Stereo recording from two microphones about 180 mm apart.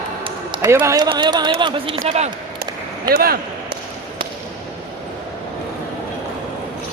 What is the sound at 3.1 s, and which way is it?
Speech, 55° right (ahead or behind).